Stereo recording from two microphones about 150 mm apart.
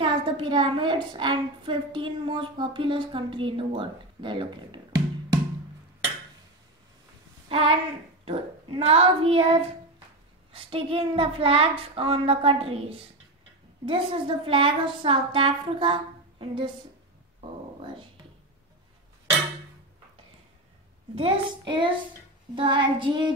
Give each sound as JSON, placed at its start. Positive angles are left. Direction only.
{"t": 0.0, "sound": "a woman's voice", "side_deg": -35}
{"t": 7.4, "sound": "a woman's voice", "side_deg": -40}
{"t": 21.1, "sound": "a woman's voice", "side_deg": -40}